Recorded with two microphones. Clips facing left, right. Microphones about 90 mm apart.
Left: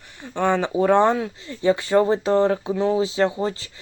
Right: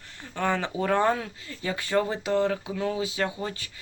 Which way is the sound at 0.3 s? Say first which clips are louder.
Left 7 dB; 20° left (ahead or behind).